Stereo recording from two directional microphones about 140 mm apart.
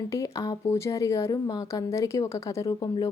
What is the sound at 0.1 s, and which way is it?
Speech, 20° left (ahead or behind).